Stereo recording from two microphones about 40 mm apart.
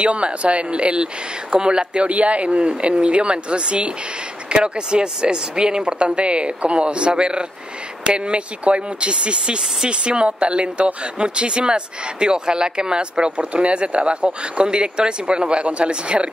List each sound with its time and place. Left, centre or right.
0.0 s speech: right